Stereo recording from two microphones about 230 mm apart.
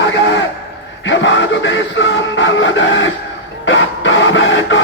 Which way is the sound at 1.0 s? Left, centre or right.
Left.